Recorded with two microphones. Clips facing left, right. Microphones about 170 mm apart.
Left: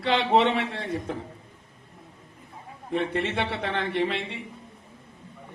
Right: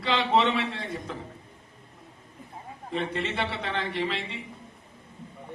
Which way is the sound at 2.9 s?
60° left (ahead or behind).